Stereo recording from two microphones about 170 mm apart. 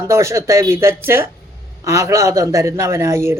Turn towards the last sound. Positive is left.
turn(degrees=-15)  # may be behind; listen again after turning